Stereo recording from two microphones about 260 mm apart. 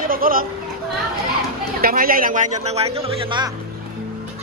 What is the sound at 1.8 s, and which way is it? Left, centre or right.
Speech, right.